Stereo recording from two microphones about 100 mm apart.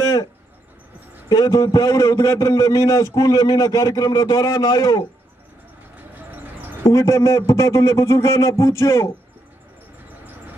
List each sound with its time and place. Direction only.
0.0 s a sound: 40° left (ahead or behind)
1.3 s a man's voice: 40° left (ahead or behind)
6.8 s a man's voice: 30° left (ahead or behind)